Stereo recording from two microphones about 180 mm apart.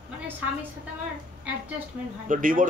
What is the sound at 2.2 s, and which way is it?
Speech, 45° right (ahead or behind).